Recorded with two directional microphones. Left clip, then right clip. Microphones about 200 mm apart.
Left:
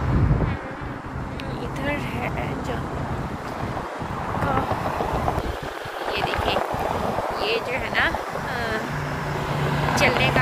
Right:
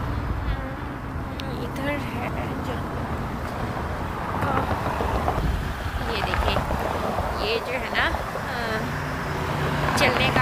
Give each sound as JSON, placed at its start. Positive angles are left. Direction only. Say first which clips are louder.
{"t": 4.9, "sound": "vehicle", "louder": "left 1 dB", "side_deg": 45}
{"t": 7.4, "sound": "a sound", "louder": "left 1 dB", "side_deg": -5}
{"t": 9.5, "sound": "vehicle", "louder": "left 1 dB", "side_deg": 10}
{"t": 9.9, "sound": "vehicle", "louder": "left 1 dB", "side_deg": -10}